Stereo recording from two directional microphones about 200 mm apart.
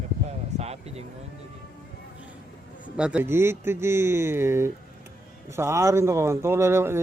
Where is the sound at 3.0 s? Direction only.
5° right (ahead or behind).